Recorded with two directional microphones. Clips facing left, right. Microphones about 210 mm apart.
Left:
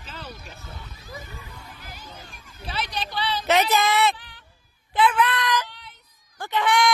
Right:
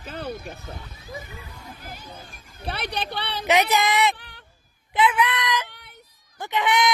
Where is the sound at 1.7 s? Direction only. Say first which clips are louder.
Right 2 dB; 50° right (ahead or behind).